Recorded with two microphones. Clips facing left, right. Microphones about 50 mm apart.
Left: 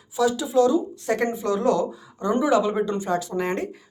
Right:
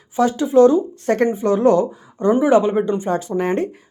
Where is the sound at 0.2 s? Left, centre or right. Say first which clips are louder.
Right 7 dB; right.